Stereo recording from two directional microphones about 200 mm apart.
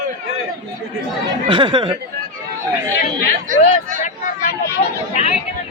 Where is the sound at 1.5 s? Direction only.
25° right (ahead or behind).